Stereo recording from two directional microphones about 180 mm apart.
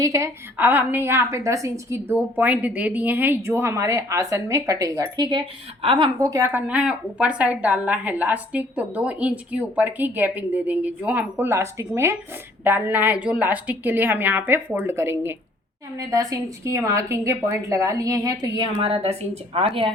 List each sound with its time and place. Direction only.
0.0 s a woman's voice: 15° right (ahead or behind)
6.1 s a woman's voice: 20° right (ahead or behind)